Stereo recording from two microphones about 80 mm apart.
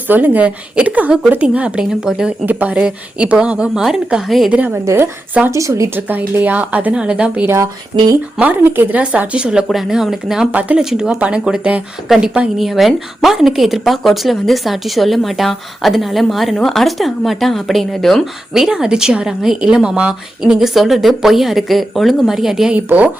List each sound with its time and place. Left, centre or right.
0.1 s a woman's voice: right
2.5 s a woman's voice: right; by 4.5 s centre
4.5 s speech: centre
5.5 s speech: right
5.9 s speech: right
7.9 s speech: right
8.4 s a woman's voice: right; by 10.5 s centre
10.5 s speech: centre
10.8 s a woman's voice: centre
12.5 s speech: centre
22.7 s speech: centre